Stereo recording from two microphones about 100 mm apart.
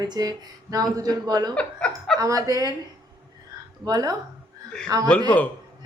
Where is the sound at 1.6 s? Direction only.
10° left (ahead or behind).